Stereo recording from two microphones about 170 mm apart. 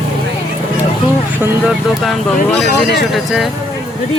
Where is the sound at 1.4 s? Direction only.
10° right (ahead or behind).